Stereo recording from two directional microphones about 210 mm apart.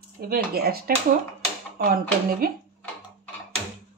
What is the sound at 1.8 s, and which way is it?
Speech, 45° right (ahead or behind).